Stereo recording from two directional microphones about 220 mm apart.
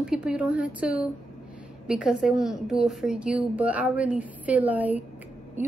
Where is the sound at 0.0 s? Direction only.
5° right (ahead or behind).